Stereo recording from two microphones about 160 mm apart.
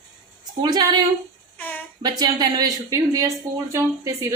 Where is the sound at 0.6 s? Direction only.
25° right (ahead or behind).